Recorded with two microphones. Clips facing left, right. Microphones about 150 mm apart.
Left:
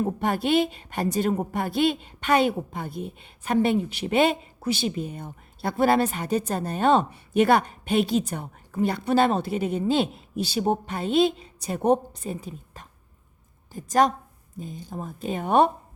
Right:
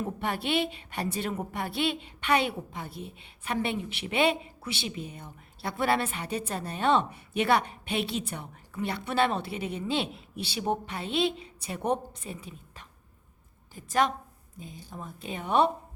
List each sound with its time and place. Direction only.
0.0 s a woman's voice: 40° left (ahead or behind)